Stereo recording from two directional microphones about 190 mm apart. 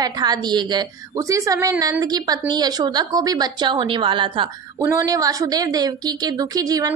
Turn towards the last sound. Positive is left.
turn(degrees=-20)  # may be behind; listen again after turning